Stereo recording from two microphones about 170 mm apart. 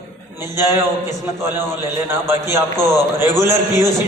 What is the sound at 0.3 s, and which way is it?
Speech, 15° right (ahead or behind).